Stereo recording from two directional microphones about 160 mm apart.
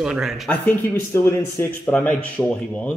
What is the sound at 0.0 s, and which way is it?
Speech, 5° right (ahead or behind).